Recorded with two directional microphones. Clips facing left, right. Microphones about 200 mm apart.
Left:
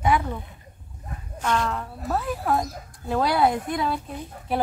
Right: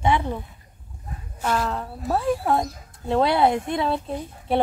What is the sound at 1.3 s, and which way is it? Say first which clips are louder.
Speech: even; 10° right (ahead or behind).